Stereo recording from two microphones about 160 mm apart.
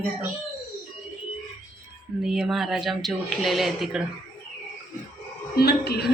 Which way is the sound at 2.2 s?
Centre (ahead or behind).